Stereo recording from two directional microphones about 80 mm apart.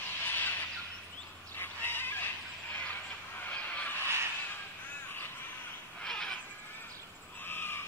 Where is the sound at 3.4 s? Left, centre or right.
Centre.